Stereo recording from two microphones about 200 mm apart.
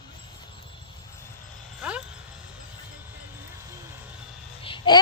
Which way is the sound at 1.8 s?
5° right (ahead or behind).